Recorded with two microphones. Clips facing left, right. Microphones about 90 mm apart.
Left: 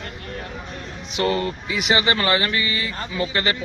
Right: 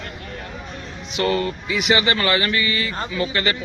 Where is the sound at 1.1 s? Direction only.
25° left (ahead or behind).